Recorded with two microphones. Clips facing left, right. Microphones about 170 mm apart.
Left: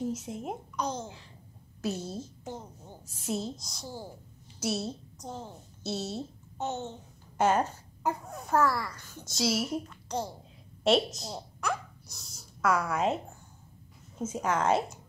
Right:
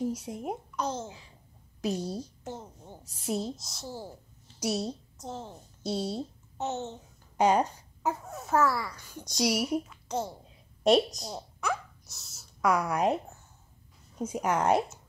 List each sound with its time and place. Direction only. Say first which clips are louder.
0.0 s a child's voice: right 1 dB; 10° right (ahead or behind)
7.3 s a sound: right 2 dB; 15° right (ahead or behind)
8.1 s a child's voice: even; 5° right (ahead or behind)
10.0 s a woman's voice: right 1 dB; 5° right (ahead or behind)
10.9 s a child's voice: right 2 dB; 15° right (ahead or behind)
11.2 s a sound: right 1 dB; centre (ahead or behind)
12.6 s a child's voice: right 1 dB; 15° right (ahead or behind)